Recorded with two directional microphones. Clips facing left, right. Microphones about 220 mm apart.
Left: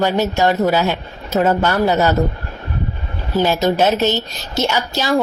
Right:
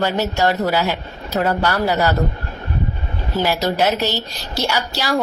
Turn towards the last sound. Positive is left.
turn(degrees=20)  # may be behind; listen again after turning